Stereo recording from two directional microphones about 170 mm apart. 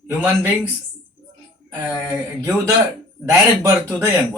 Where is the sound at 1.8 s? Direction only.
10° right (ahead or behind).